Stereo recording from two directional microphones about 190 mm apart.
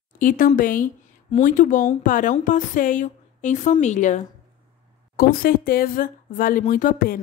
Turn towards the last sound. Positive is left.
turn(degrees=50)  # may be behind; listen again after turning